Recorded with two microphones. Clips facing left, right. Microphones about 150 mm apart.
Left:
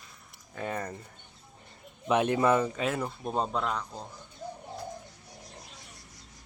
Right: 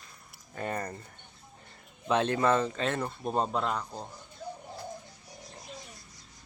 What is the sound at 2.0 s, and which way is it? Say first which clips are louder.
Speech: left 1 dB; 15° left (ahead or behind).